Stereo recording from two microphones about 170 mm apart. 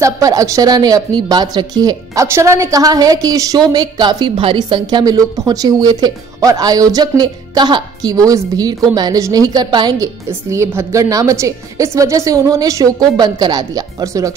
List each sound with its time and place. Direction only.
0.0 s a woman's voice: 20° right (ahead or behind)